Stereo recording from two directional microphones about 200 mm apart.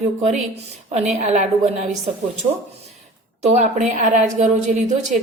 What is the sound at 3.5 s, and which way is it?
A woman's voice, 35° right (ahead or behind).